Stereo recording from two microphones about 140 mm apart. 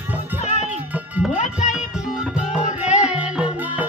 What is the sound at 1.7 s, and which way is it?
Music, 5° right (ahead or behind).